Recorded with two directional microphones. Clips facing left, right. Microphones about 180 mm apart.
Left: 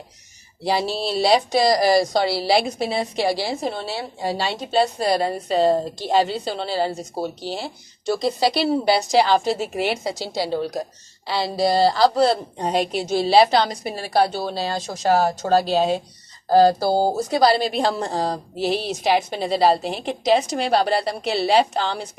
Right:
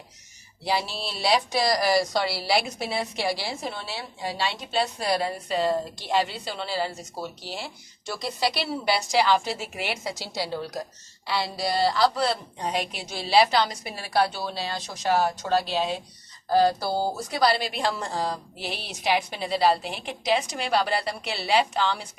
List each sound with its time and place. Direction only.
0.6 s a woman's voice: 35° left (ahead or behind)
1.9 s a woman's voice: 25° left (ahead or behind)
11.3 s a woman's voice: 35° left (ahead or behind)